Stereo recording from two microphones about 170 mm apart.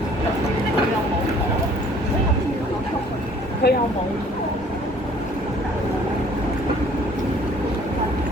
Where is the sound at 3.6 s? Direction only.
75° left (ahead or behind).